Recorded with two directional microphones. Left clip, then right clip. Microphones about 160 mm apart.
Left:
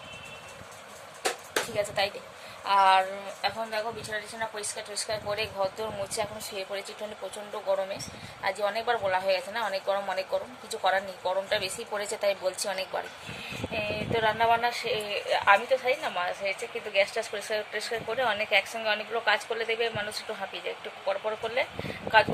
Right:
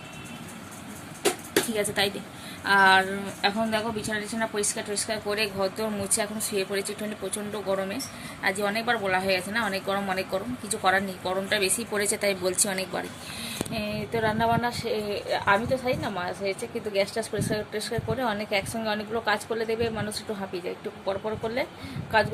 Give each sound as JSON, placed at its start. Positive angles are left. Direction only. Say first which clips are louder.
{"t": 1.7, "sound": "speech", "louder": "right 2 dB", "side_deg": 5}
{"t": 3.7, "sound": "speech", "louder": "right 4 dB", "side_deg": -40}
{"t": 5.0, "sound": "speech", "louder": "right 2 dB", "side_deg": 0}